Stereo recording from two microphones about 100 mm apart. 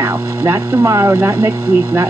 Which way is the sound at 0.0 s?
20° right (ahead or behind).